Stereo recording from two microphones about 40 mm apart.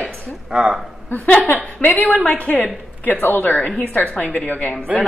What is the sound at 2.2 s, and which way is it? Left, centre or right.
Speech, left.